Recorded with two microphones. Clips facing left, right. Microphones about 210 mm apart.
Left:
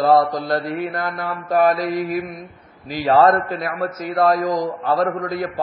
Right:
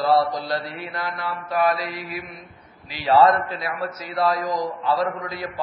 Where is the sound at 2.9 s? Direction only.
45° left (ahead or behind).